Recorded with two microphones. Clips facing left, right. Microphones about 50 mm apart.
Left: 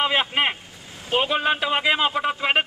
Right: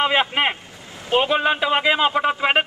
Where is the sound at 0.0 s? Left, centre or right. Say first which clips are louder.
Right 2 dB; centre.